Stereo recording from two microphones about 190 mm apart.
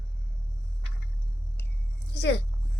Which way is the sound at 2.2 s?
65° left (ahead or behind).